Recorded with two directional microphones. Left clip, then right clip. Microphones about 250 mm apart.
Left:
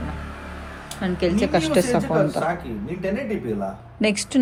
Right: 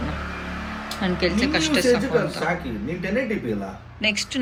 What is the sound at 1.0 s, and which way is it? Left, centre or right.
A woman's voice, centre.